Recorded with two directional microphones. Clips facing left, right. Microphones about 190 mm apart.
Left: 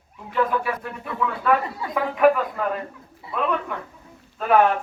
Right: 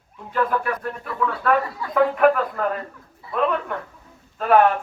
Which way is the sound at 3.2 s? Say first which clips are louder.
Right 2 dB; 25° left (ahead or behind).